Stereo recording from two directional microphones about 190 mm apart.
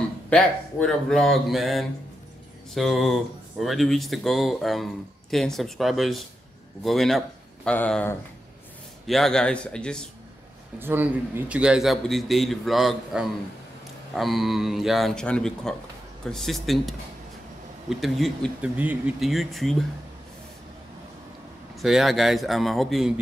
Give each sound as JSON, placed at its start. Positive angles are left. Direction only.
{"t": 0.3, "sound": "speech", "side_deg": 5}
{"t": 10.8, "sound": "speech", "side_deg": -10}
{"t": 21.8, "sound": "speech", "side_deg": 0}